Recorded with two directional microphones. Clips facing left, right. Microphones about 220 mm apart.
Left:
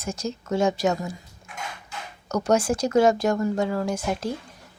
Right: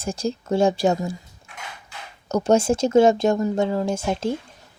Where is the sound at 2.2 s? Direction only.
25° right (ahead or behind).